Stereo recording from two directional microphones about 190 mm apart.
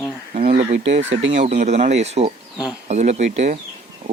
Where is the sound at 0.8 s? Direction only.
35° right (ahead or behind).